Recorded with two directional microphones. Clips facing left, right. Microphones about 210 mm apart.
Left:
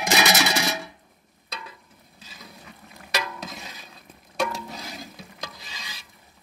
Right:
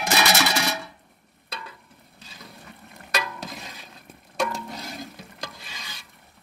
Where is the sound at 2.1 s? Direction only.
5° left (ahead or behind).